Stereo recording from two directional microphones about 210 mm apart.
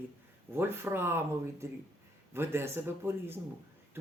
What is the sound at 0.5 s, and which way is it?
Speech, 10° right (ahead or behind).